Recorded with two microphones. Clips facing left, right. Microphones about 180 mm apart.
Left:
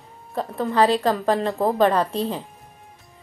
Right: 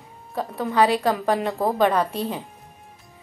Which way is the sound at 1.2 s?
15° right (ahead or behind).